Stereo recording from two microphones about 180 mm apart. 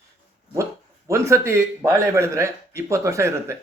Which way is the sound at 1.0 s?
15° right (ahead or behind).